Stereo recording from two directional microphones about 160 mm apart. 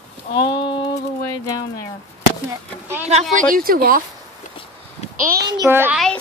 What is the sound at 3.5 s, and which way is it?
Speech, 65° right (ahead or behind).